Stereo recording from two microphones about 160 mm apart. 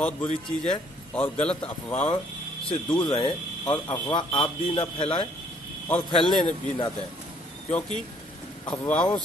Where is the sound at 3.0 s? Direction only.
30° left (ahead or behind).